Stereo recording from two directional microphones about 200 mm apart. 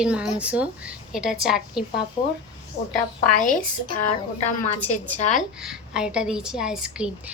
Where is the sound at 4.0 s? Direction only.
35° left (ahead or behind).